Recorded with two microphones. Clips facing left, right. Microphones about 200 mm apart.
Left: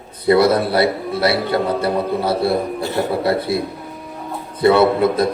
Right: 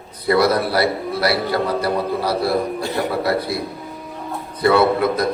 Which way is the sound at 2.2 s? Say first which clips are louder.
Left 1 dB; 25° left (ahead or behind).